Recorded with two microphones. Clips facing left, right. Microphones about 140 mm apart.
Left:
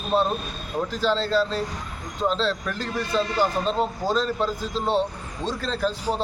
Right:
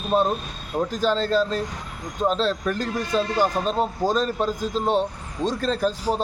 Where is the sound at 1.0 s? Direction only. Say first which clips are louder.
Right 1 dB; 45° right (ahead or behind).